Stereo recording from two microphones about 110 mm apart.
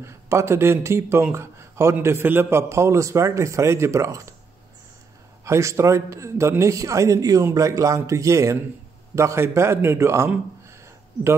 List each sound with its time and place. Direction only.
0.0 s speech: 25° right (ahead or behind)
5.4 s speech: 25° right (ahead or behind)